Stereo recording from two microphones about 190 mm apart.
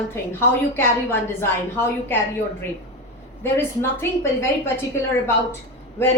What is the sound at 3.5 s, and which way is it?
A woman's voice, 15° left (ahead or behind).